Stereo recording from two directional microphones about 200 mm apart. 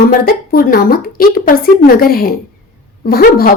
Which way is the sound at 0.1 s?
45° left (ahead or behind).